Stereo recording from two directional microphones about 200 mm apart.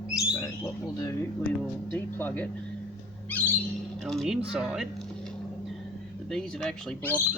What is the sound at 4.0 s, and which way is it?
Speech, centre (ahead or behind).